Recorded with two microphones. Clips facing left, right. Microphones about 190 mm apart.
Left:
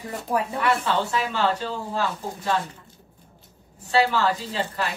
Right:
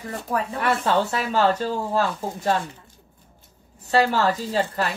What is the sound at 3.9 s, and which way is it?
Speech, 40° right (ahead or behind).